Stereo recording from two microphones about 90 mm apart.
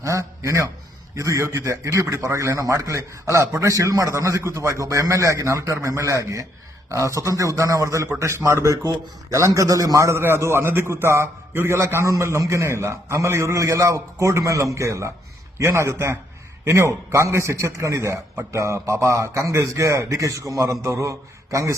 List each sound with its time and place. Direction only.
0.0 s a man's voice: 35° right (ahead or behind)